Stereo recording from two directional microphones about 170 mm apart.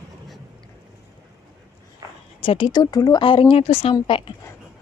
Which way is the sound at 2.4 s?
30° left (ahead or behind).